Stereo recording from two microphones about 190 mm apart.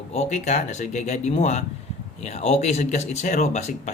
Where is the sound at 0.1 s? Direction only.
35° left (ahead or behind).